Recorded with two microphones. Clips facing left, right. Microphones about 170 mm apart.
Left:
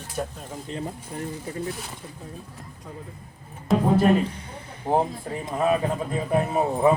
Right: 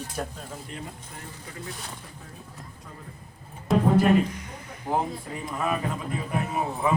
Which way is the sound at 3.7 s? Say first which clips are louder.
Left 1 dB; centre (ahead or behind).